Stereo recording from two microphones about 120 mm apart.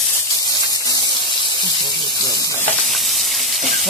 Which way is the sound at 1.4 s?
40° left (ahead or behind).